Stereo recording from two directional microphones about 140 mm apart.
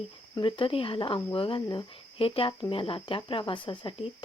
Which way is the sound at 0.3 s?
35° left (ahead or behind).